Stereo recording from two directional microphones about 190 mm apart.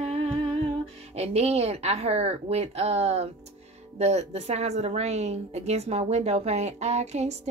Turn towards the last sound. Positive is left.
turn(degrees=-35)  # may be behind; listen again after turning